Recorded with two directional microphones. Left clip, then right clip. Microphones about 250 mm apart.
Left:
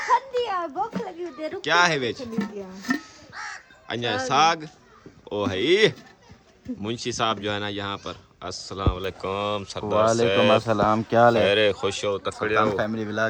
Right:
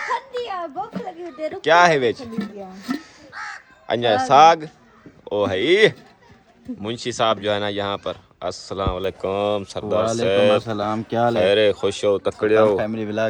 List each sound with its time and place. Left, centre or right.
0.1 s a sound: centre
1.6 s speech: centre
2.8 s chopping: centre
3.3 s crow: left
3.8 s speech: centre